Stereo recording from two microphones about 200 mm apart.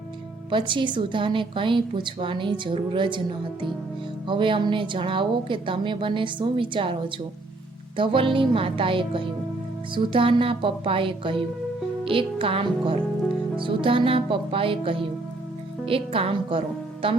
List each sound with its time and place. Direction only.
0.5 s a woman's voice: 25° right (ahead or behind)
4.3 s a woman's voice: 25° right (ahead or behind)
7.9 s a woman's voice: 25° right (ahead or behind)